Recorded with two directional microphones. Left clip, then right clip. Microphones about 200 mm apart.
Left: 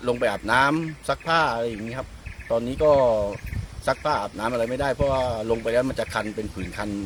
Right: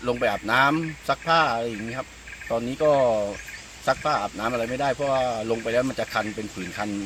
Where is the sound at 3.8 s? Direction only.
30° left (ahead or behind).